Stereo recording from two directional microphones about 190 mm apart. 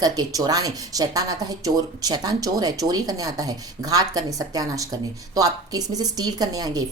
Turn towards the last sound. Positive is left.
turn(degrees=-20)  # may be behind; listen again after turning